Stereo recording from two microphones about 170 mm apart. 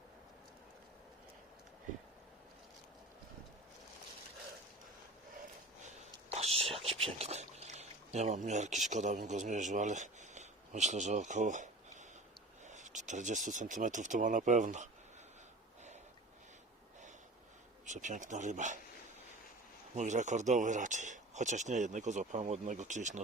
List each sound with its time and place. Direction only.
6.3 s a sound: 40° right (ahead or behind)
8.9 s speech: 45° right (ahead or behind)
17.8 s speech: 45° right (ahead or behind)
20.0 s speech: 45° right (ahead or behind)